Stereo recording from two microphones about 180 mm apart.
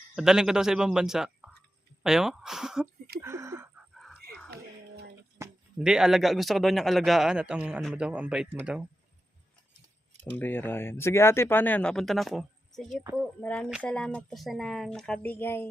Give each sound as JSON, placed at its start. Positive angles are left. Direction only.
{"t": 0.2, "sound": "a man's voice", "side_deg": -5}
{"t": 3.2, "sound": "a sound", "side_deg": -15}
{"t": 3.9, "sound": "dog", "side_deg": 0}
{"t": 5.4, "sound": "a sound", "side_deg": -15}
{"t": 5.8, "sound": "a man's voice", "side_deg": -5}
{"t": 10.3, "sound": "a man's voice", "side_deg": 10}